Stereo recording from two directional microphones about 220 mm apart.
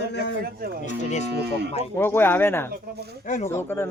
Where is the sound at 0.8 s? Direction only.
30° left (ahead or behind).